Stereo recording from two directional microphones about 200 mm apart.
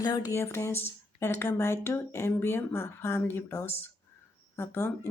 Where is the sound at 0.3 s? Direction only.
15° left (ahead or behind).